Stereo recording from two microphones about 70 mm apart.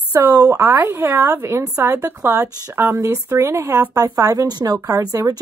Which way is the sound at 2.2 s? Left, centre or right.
Right.